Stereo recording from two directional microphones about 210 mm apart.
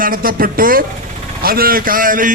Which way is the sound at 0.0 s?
40° right (ahead or behind).